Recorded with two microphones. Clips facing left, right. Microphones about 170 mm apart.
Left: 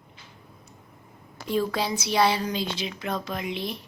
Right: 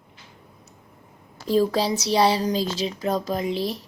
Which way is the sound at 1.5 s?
35° right (ahead or behind).